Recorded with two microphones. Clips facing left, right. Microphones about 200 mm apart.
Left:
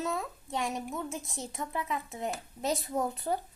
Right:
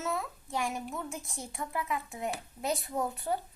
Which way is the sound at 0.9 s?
Centre (ahead or behind).